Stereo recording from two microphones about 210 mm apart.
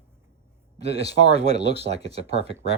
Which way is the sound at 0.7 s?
55° left (ahead or behind).